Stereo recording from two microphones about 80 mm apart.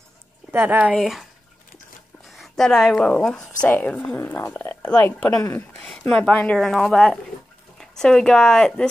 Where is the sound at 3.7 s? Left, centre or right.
Left.